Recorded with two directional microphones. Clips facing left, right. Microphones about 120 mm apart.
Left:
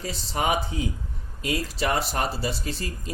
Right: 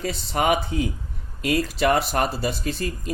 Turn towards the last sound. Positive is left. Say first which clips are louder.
# right 5 dB
turn(degrees=-55)  # may be behind; listen again after turning